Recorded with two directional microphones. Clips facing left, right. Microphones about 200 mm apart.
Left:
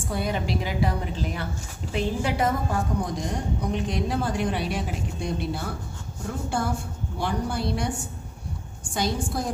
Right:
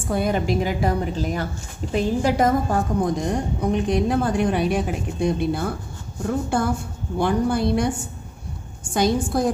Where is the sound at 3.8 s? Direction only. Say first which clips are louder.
Right 6 dB; 55° right (ahead or behind).